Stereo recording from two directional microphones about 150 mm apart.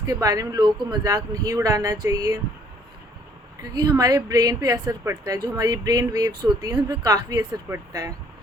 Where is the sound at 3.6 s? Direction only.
25° right (ahead or behind).